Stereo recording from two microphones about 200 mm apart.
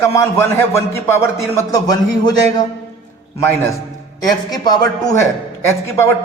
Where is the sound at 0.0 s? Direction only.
15° left (ahead or behind).